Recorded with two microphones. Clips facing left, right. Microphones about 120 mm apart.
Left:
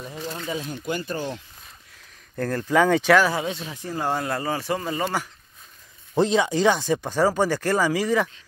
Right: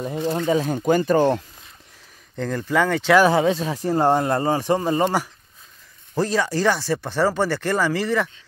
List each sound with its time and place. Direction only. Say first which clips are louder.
0.3 s speech: right 10 dB; 50° right (ahead or behind)
2.3 s speech: left 1 dB; 5° left (ahead or behind)
3.3 s speech: right 9 dB; 40° right (ahead or behind)
4.6 s speech: right 6 dB; 20° right (ahead or behind)
6.1 s speech: left 1 dB; 20° left (ahead or behind)